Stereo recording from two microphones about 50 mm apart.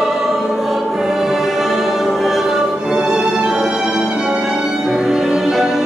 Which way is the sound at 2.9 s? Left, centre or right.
Centre.